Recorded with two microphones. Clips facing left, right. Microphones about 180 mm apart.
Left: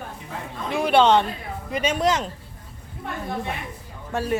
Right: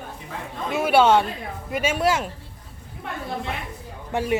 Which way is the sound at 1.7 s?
5° right (ahead or behind).